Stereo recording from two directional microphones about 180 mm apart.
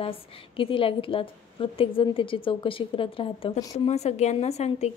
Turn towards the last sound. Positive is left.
turn(degrees=35)  # may be behind; listen again after turning